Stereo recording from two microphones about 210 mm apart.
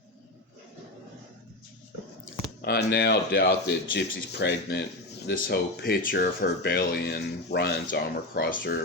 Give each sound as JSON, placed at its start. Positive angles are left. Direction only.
{"t": 2.6, "sound": "speech", "side_deg": 50}